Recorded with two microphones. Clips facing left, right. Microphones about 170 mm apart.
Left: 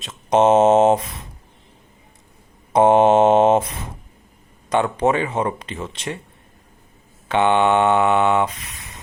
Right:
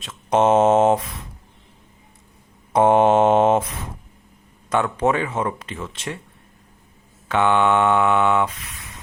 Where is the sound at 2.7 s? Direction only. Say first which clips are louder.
Left 2 dB; 20° left (ahead or behind).